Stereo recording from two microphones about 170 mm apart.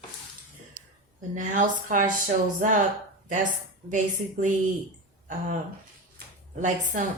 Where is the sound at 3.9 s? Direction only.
45° right (ahead or behind).